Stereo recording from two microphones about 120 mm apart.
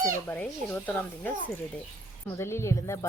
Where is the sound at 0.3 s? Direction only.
15° left (ahead or behind).